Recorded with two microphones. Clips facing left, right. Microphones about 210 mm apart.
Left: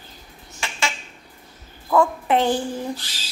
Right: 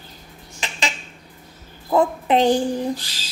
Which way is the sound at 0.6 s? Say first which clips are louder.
Even; 20° right (ahead or behind).